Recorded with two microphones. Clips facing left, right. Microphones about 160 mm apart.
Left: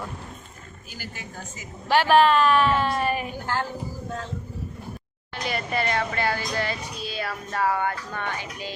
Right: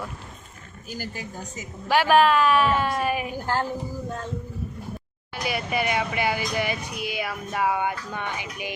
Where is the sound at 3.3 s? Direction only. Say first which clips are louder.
Right 2 dB; 35° right (ahead or behind).